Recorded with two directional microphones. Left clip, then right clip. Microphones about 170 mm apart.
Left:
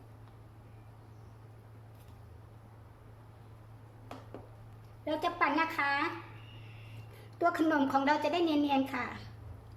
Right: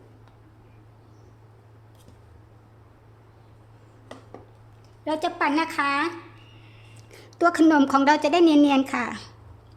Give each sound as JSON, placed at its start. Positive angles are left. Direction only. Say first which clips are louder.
{"t": 5.0, "sound": "a woman's voice", "louder": "right 6 dB", "side_deg": -55}
{"t": 7.3, "sound": "a woman's voice", "louder": "right 11 dB", "side_deg": -55}